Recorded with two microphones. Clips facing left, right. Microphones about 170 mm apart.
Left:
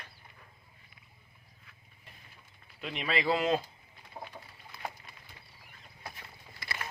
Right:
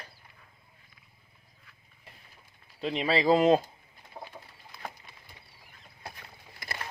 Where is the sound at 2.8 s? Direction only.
30° right (ahead or behind).